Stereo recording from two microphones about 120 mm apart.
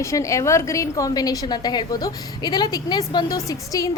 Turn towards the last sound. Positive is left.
turn(degrees=30)  # may be behind; listen again after turning